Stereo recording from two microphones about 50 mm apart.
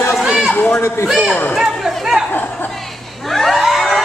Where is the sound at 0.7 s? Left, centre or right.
Left.